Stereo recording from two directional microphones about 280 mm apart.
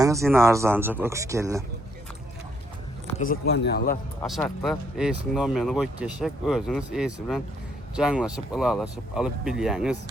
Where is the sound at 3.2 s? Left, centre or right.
Left.